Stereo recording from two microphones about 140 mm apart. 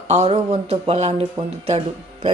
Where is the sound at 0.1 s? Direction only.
50° right (ahead or behind).